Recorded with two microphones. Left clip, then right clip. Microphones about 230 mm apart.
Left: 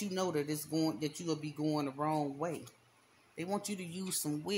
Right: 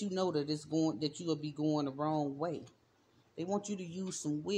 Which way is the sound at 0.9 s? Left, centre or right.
Left.